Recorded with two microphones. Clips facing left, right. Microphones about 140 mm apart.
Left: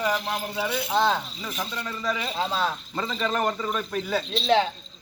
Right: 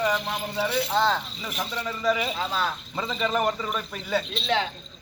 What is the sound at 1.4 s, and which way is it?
Speech, 5° right (ahead or behind).